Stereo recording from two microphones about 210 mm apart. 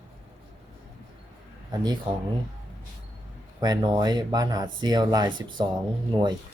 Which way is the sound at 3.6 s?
20° right (ahead or behind).